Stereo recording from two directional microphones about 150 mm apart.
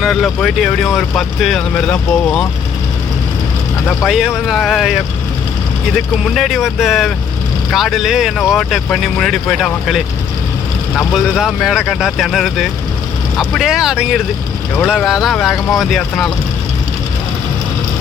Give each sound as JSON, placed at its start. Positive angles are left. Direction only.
{"t": 0.0, "sound": "speech", "side_deg": 0}
{"t": 3.8, "sound": "speech", "side_deg": 0}
{"t": 6.2, "sound": "speech", "side_deg": 0}